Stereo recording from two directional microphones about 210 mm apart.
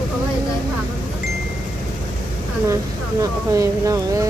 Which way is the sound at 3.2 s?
15° right (ahead or behind).